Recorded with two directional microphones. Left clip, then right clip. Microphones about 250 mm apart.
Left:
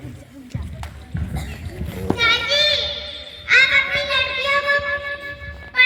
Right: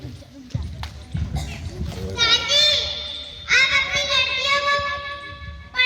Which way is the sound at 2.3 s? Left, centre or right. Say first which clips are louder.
Right 3 dB; right.